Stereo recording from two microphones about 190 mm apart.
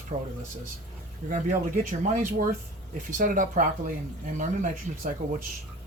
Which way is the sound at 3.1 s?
45° right (ahead or behind).